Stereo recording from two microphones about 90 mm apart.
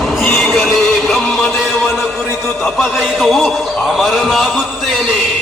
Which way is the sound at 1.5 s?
25° left (ahead or behind).